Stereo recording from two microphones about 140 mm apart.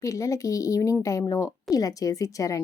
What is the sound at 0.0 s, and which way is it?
A woman's voice, 25° left (ahead or behind).